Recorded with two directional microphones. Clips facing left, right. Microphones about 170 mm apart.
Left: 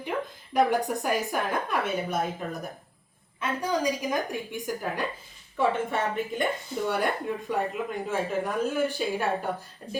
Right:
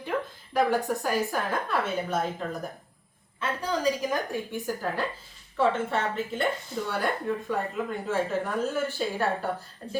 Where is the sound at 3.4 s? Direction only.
15° left (ahead or behind).